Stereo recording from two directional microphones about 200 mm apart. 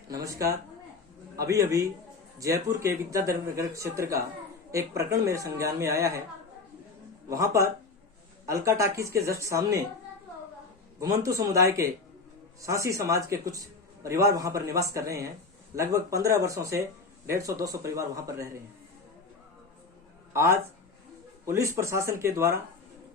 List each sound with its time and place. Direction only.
0.1 s a man's voice: 15° right (ahead or behind)
7.3 s a man's voice: 15° right (ahead or behind)
11.0 s a man's voice: 15° right (ahead or behind)
20.3 s a man's voice: 15° right (ahead or behind)